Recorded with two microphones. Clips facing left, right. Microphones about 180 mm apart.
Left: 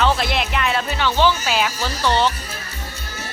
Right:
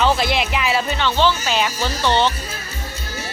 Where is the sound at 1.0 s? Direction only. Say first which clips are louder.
Left 3 dB; 10° left (ahead or behind).